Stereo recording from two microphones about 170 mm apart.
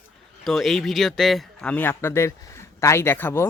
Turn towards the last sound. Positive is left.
turn(degrees=15)  # may be behind; listen again after turning